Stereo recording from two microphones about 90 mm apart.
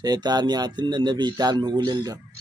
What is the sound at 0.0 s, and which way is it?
A man's voice, 50° right (ahead or behind).